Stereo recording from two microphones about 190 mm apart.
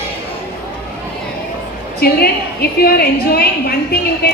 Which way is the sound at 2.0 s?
55° left (ahead or behind).